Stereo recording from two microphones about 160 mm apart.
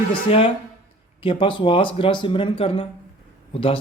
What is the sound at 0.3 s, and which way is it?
Speech, 35° left (ahead or behind).